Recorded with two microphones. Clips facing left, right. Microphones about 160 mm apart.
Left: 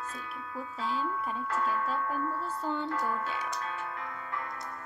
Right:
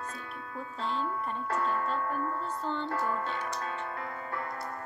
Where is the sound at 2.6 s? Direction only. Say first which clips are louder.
Left 2 dB; 5° left (ahead or behind).